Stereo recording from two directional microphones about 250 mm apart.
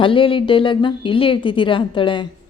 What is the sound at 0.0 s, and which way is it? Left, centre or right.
A woman's voice, left.